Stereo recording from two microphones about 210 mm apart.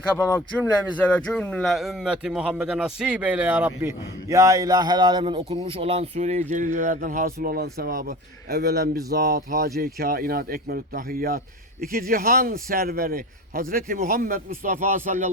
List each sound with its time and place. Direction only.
0.9 s a man's voice: 5° left (ahead or behind); by 15.3 s 35° right (ahead or behind)